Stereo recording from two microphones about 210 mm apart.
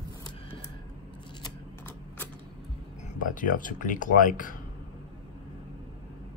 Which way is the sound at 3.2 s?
40° left (ahead or behind).